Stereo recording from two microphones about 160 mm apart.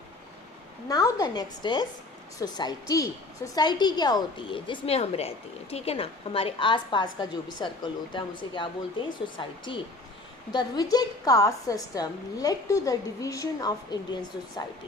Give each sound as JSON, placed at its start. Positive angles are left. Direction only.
{"t": 0.9, "sound": "a woman's voice", "side_deg": 25}